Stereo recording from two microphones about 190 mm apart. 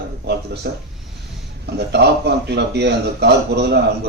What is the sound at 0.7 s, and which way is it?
Speech, 60° right (ahead or behind).